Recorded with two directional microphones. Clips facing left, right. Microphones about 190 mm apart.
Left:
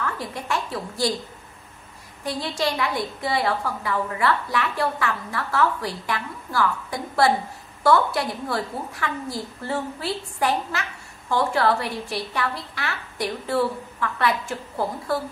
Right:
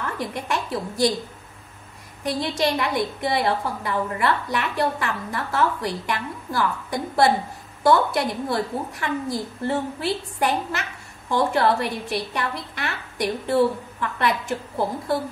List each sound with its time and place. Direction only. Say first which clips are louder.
0.0 s a woman's voice: right 1 dB; 20° right (ahead or behind)
2.2 s a woman's voice: right 3 dB; 20° right (ahead or behind)